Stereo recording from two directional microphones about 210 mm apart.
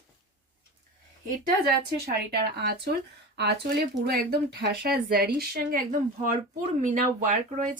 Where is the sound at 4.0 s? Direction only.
50° right (ahead or behind).